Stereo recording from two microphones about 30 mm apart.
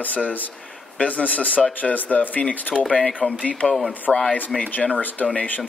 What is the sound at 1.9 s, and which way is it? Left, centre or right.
Speech, left.